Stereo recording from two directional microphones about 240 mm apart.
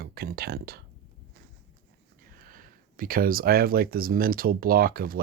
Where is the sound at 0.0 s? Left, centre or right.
Right.